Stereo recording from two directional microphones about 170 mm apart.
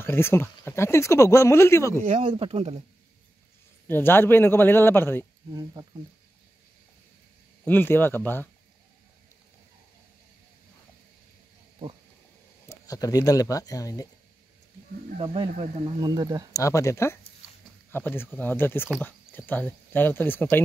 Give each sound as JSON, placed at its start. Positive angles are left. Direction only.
{"t": 0.0, "sound": "speech", "side_deg": 15}
{"t": 2.2, "sound": "speech", "side_deg": -35}
{"t": 3.8, "sound": "speech", "side_deg": 15}
{"t": 5.5, "sound": "speech", "side_deg": -25}
{"t": 7.6, "sound": "speech", "side_deg": 10}
{"t": 12.6, "sound": "speech", "side_deg": 20}
{"t": 15.1, "sound": "speech", "side_deg": -30}
{"t": 16.5, "sound": "speech", "side_deg": 20}